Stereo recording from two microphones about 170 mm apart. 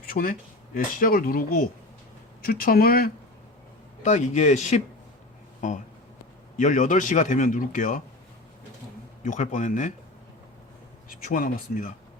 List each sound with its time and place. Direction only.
0.0 s speech: 55° left (ahead or behind)
4.0 s a man's voice: 45° left (ahead or behind)
9.2 s a man's voice: 45° left (ahead or behind)
11.3 s a man's voice: 55° left (ahead or behind)